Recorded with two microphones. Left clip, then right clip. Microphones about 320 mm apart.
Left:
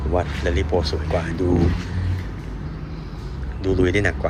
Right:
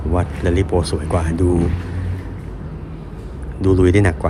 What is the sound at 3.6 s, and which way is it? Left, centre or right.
Speech, centre.